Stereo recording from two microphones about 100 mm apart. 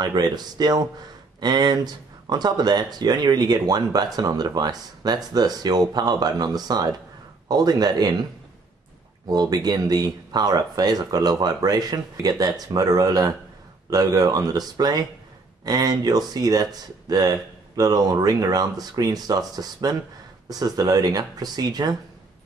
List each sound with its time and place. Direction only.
0.0 s speech: 40° right (ahead or behind)
9.3 s speech: 40° right (ahead or behind)